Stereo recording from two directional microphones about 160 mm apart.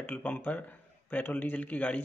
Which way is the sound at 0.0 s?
10° left (ahead or behind).